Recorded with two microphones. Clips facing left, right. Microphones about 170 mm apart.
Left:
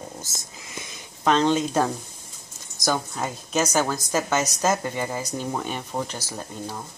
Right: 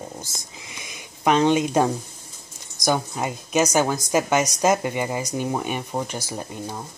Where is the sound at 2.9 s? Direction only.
15° right (ahead or behind).